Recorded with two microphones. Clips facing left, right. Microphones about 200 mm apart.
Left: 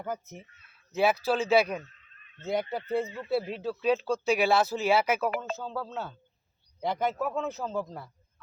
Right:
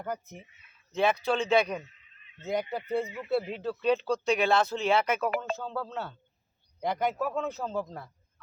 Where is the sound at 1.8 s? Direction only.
15° right (ahead or behind).